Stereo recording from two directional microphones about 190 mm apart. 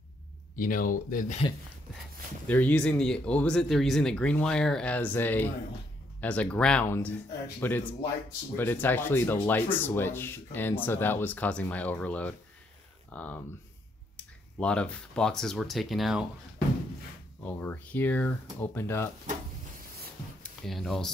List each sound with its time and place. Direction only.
0.6 s speech: 45° left (ahead or behind)
2.4 s speech: 10° left (ahead or behind)
17.4 s speech: 10° left (ahead or behind)
20.4 s speech: centre (ahead or behind)